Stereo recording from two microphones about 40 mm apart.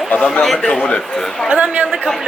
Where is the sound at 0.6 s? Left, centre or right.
Left.